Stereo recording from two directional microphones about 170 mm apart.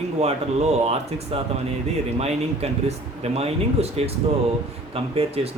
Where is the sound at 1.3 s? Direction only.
35° right (ahead or behind).